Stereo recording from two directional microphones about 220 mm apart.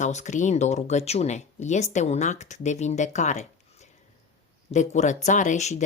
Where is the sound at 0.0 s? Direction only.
35° left (ahead or behind).